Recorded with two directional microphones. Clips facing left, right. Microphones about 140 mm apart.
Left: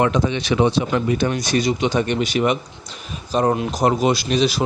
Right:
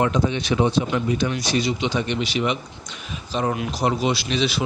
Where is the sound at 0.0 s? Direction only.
80° left; by 2.6 s 50° left (ahead or behind).